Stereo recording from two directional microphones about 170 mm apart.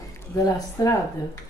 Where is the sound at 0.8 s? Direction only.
20° left (ahead or behind).